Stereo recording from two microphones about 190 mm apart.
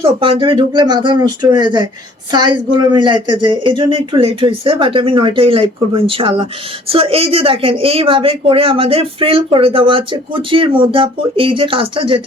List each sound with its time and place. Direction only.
0.0 s a woman's voice: 25° right (ahead or behind)